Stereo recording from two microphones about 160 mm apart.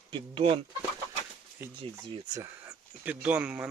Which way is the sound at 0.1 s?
30° right (ahead or behind).